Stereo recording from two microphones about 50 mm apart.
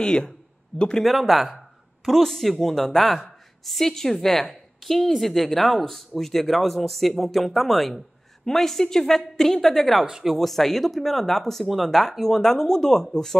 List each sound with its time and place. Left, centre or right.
0.0 s speech: centre
1.0 s a woman's voice: centre